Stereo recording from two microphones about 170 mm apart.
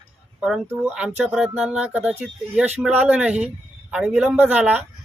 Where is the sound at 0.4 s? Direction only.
5° right (ahead or behind).